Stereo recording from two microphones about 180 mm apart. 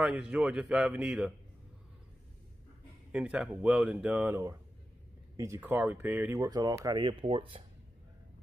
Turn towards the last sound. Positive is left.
turn(degrees=-30)  # may be behind; listen again after turning